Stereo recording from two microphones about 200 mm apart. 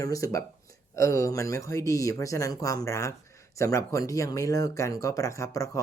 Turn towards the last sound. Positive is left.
turn(degrees=15)  # may be behind; listen again after turning